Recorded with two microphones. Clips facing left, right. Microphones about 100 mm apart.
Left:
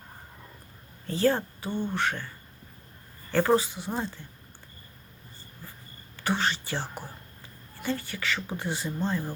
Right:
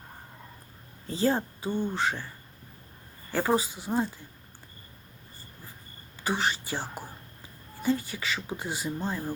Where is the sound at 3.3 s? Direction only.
10° right (ahead or behind).